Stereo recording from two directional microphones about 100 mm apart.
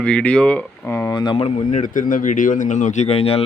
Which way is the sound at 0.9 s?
25° left (ahead or behind).